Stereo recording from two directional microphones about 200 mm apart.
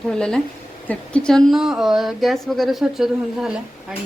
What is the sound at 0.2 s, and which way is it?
Speech, 5° left (ahead or behind).